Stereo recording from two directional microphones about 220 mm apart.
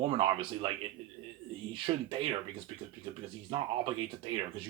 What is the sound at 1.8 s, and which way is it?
Speech, 25° right (ahead or behind).